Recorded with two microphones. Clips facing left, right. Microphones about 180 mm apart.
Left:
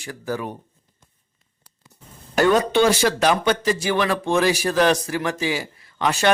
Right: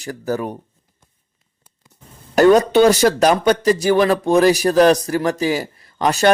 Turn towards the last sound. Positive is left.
turn(degrees=-40)  # may be behind; listen again after turning